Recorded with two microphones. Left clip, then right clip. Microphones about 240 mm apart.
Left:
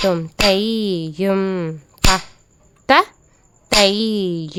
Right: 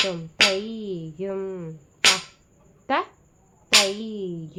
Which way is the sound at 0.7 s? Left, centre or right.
Left.